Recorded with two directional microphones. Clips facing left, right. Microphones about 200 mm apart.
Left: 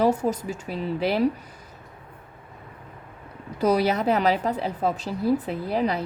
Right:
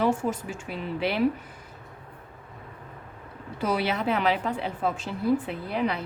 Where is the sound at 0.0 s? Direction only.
40° left (ahead or behind).